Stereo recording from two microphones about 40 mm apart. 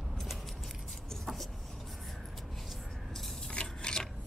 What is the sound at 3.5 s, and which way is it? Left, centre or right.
Rub, left.